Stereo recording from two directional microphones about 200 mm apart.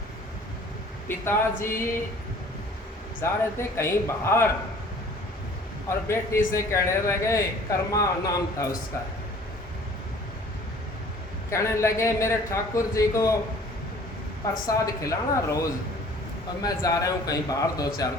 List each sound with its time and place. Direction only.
1.0 s a man's voice: 10° left (ahead or behind)
3.2 s a man's voice: 15° left (ahead or behind)
6.1 s a man's voice: 15° left (ahead or behind)
11.5 s a man's voice: 15° left (ahead or behind)
15.0 s a man's voice: 15° left (ahead or behind)